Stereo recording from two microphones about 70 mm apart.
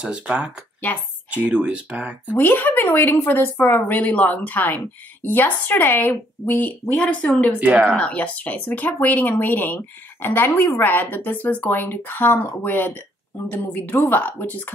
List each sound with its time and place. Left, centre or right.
0.0 s speech: centre
0.9 s speech: left
1.3 s speech: centre
2.3 s speech: left
7.0 s speech: centre
7.6 s speech: right
7.9 s speech: centre